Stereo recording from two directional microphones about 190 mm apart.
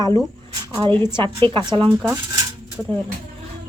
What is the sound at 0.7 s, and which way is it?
Speech, 20° right (ahead or behind).